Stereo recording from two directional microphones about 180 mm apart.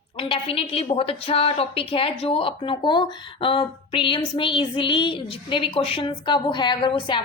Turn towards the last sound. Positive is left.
turn(degrees=25)  # may be behind; listen again after turning